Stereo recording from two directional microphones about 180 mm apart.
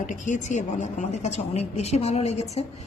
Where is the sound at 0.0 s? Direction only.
45° left (ahead or behind).